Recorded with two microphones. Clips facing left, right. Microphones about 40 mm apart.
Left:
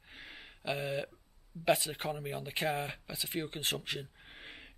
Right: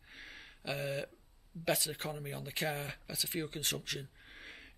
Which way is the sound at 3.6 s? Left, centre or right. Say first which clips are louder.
Left 3 dB; left.